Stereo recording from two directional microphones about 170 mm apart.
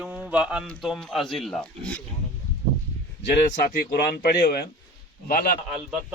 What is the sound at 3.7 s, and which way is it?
Speech, 65° left (ahead or behind).